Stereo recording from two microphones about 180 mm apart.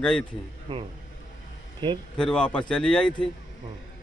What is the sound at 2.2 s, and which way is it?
Speech, 5° left (ahead or behind).